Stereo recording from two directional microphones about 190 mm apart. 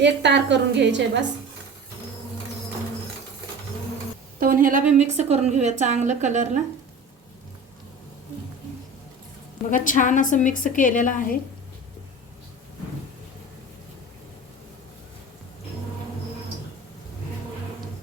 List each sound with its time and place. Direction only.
0.0 s a woman's voice: 65° right (ahead or behind)
4.4 s a woman's voice: 45° right (ahead or behind)
9.6 s a woman's voice: 45° left (ahead or behind)